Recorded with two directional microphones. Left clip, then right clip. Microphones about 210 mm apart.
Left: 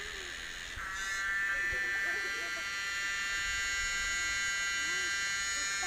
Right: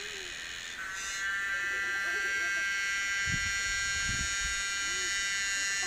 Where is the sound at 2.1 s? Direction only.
45° left (ahead or behind).